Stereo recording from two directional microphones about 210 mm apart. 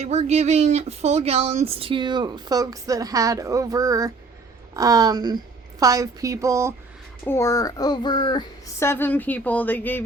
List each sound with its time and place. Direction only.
0.0 s a woman's voice: 30° right (ahead or behind); by 6.7 s 15° right (ahead or behind)
7.3 s speech: 15° left (ahead or behind)